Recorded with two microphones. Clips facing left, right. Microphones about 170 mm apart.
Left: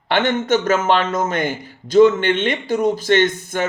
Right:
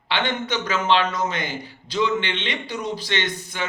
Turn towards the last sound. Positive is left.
turn(degrees=50)  # may be behind; listen again after turning